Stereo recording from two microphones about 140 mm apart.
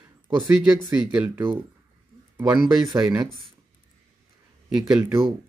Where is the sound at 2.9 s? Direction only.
20° right (ahead or behind).